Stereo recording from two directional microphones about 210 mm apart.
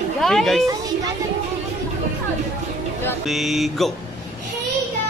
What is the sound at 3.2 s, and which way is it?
Speech, centre (ahead or behind).